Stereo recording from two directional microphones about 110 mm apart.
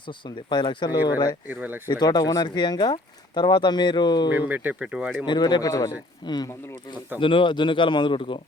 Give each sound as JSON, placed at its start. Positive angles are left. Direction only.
{"t": 0.1, "sound": "speech", "side_deg": 45}
{"t": 1.5, "sound": "speech", "side_deg": -15}
{"t": 1.9, "sound": "speech", "side_deg": 40}
{"t": 4.3, "sound": "speech", "side_deg": -15}
{"t": 5.2, "sound": "speech", "side_deg": 40}
{"t": 7.2, "sound": "speech", "side_deg": 50}